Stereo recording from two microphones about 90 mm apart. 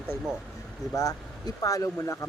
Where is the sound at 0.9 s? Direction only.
40° left (ahead or behind).